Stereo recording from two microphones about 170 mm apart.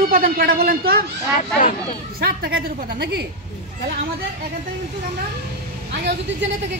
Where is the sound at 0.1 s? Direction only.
60° right (ahead or behind).